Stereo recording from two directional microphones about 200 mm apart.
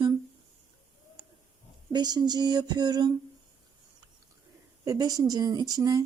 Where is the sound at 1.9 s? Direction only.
20° right (ahead or behind).